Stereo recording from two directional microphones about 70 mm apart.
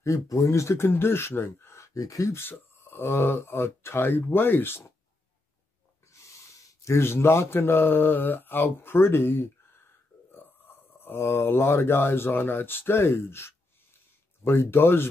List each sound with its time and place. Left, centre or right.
0.0 s speech: left
2.0 s speech: left
2.3 s speech: left
6.1 s a man's voice: left